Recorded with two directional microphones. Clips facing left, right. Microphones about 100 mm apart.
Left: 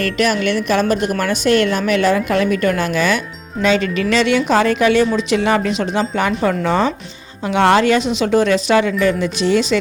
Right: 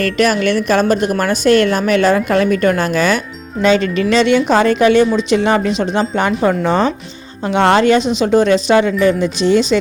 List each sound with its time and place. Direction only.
0.0 s speech: 40° right (ahead or behind); by 9.7 s 25° right (ahead or behind)